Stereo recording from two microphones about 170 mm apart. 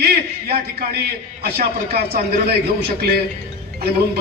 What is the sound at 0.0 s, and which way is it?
A man's voice, 65° right (ahead or behind).